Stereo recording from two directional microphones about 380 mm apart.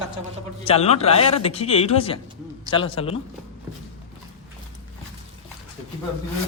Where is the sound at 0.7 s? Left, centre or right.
Centre.